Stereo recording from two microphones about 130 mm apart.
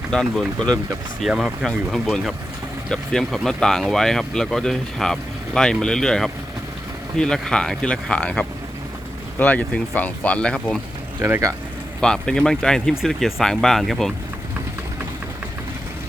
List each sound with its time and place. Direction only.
0.1 s speech: 5° left (ahead or behind)
11.2 s speech: 20° right (ahead or behind)
11.9 s speech: 5° left (ahead or behind)